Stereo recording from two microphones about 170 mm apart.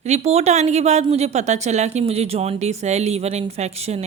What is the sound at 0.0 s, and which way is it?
Speech, 40° right (ahead or behind).